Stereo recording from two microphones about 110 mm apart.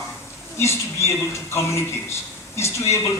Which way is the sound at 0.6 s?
25° left (ahead or behind).